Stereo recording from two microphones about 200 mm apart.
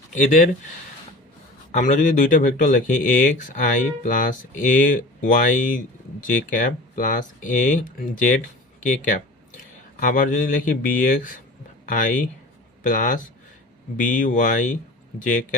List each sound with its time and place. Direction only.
0.1 s speech: 40° left (ahead or behind)
1.7 s speech: 40° left (ahead or behind)